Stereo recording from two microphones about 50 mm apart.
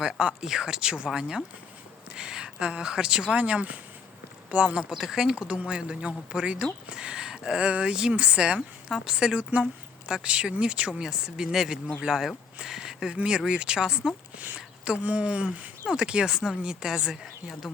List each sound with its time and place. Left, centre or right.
0.0 s a woman's voice: centre
12.5 s a sound: centre
13.1 s speech: centre
14.3 s speech: right